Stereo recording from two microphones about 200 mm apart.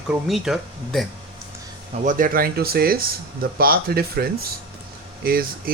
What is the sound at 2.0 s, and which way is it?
Speech, 45° right (ahead or behind).